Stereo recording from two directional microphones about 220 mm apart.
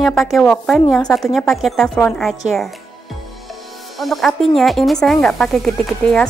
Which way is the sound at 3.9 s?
Centre (ahead or behind).